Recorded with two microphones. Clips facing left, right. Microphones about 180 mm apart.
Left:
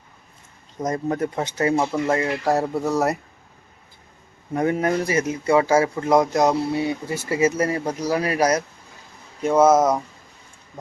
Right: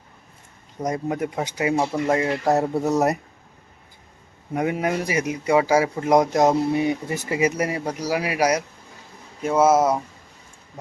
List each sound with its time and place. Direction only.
0.8 s speech: 15° right (ahead or behind)
4.5 s speech: 10° right (ahead or behind)